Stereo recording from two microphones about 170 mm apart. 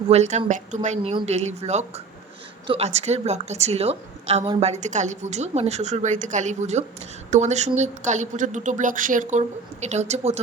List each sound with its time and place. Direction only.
0.1 s a woman's voice: 40° right (ahead or behind)
9.8 s a woman's voice: 40° right (ahead or behind)